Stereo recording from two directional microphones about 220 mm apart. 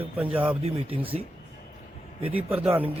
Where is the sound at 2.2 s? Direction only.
25° right (ahead or behind).